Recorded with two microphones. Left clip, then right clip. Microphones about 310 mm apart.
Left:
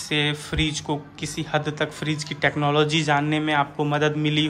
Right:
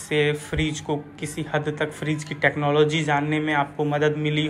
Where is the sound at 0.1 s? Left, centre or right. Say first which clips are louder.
Right 2 dB; centre.